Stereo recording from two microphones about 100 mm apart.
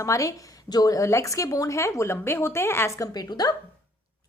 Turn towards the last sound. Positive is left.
turn(degrees=40)  # may be behind; listen again after turning